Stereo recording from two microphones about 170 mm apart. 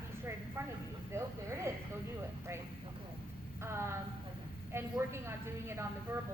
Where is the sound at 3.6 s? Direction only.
15° right (ahead or behind).